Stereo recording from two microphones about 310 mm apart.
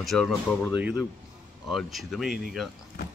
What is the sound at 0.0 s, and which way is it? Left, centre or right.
Speech, centre.